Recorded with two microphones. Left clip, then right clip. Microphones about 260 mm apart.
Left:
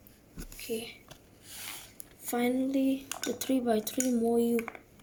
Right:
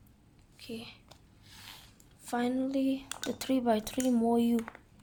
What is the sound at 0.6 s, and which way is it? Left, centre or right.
Speech, centre.